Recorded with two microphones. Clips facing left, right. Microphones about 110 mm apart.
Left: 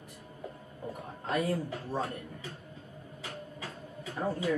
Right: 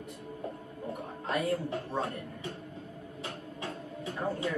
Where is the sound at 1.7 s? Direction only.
25° right (ahead or behind).